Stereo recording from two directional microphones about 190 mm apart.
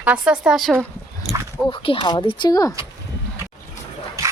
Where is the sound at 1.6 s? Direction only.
25° left (ahead or behind).